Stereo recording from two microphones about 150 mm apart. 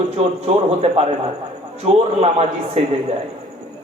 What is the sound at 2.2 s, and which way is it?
Speech, 45° right (ahead or behind).